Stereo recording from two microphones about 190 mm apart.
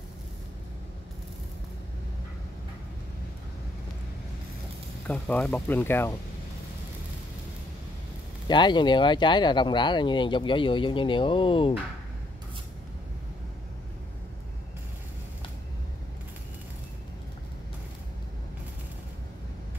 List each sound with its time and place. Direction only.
5.0 s speech: 5° left (ahead or behind)
8.5 s speech: 25° left (ahead or behind)